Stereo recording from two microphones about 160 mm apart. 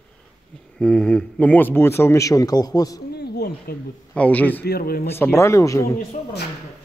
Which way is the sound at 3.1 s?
90° left.